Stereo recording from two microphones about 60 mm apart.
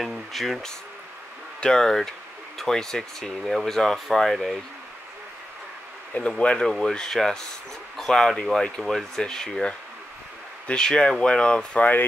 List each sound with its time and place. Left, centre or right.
0.0 s speech: centre
6.1 s speech: centre